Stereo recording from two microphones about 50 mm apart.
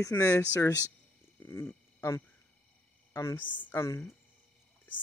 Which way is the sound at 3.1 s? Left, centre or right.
Left.